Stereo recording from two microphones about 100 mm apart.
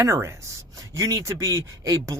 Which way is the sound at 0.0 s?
30° right (ahead or behind).